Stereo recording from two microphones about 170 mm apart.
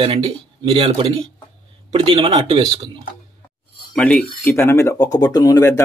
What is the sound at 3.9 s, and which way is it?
Speech, 5° left (ahead or behind).